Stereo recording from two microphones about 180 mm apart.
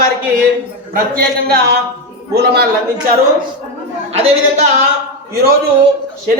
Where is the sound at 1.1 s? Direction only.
60° right (ahead or behind).